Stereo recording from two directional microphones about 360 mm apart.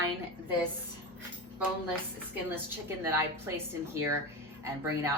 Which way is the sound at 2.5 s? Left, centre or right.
Centre.